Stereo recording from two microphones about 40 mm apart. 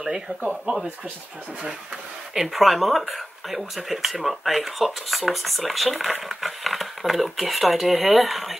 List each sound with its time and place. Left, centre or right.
0.0 s speech: centre
2.3 s speech: centre